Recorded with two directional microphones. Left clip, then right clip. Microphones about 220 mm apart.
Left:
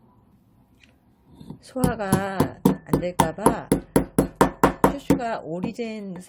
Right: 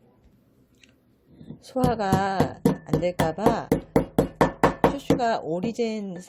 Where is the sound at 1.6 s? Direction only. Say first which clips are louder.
Right 2 dB; 10° right (ahead or behind).